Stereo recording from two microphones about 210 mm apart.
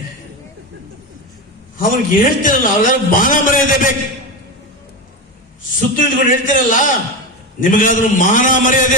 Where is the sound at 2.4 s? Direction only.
40° left (ahead or behind).